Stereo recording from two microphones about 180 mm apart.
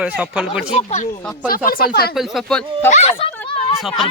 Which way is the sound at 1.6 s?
55° left (ahead or behind).